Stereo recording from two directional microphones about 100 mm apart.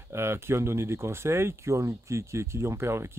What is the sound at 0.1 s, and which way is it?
Speech, 25° right (ahead or behind).